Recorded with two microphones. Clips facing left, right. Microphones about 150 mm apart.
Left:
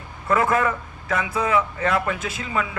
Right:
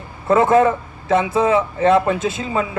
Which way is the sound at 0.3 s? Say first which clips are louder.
Right 7 dB; 25° right (ahead or behind).